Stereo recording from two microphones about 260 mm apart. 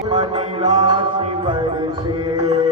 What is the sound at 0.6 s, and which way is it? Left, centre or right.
Music, centre.